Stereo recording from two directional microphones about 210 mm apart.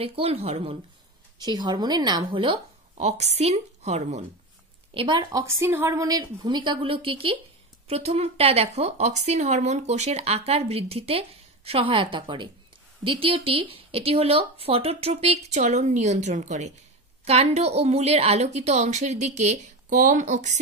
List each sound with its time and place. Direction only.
0.0 s a woman's voice: 25° right (ahead or behind)
4.9 s a woman's voice: 20° right (ahead or behind)